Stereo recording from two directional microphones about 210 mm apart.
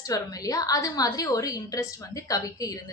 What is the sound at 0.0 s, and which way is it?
A woman's voice, 15° left (ahead or behind).